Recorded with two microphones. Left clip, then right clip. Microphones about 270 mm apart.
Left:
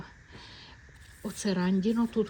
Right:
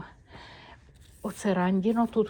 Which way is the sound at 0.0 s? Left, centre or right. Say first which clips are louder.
Right 2 dB; centre.